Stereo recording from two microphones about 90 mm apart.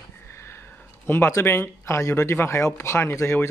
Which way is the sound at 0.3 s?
25° left (ahead or behind).